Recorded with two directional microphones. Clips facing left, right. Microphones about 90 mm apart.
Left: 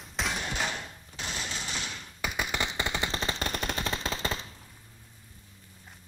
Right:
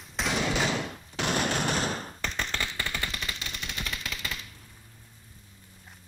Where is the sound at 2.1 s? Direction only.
10° left (ahead or behind); by 3.4 s 30° left (ahead or behind).